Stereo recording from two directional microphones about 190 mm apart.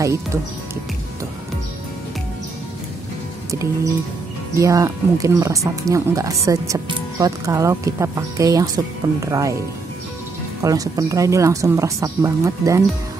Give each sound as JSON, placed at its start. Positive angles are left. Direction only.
{"t": 0.0, "sound": "speech", "side_deg": -15}
{"t": 4.6, "sound": "speech", "side_deg": -15}
{"t": 10.6, "sound": "speech", "side_deg": -20}